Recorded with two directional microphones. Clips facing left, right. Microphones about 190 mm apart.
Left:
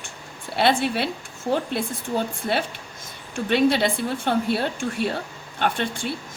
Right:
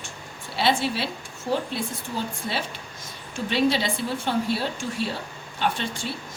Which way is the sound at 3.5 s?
55° left (ahead or behind).